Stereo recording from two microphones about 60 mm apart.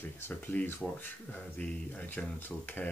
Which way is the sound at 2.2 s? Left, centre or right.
Centre.